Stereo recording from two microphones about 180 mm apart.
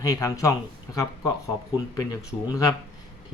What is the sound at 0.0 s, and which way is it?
Speech, 20° left (ahead or behind).